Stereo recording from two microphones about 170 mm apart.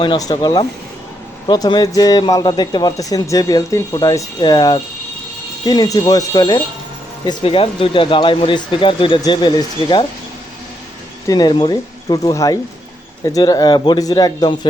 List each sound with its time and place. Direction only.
0.0 s a man's voice: 25° left (ahead or behind)
11.3 s a man's voice: 25° left (ahead or behind)